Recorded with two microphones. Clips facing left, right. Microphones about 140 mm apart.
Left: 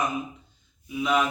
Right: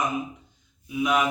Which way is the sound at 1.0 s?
10° right (ahead or behind).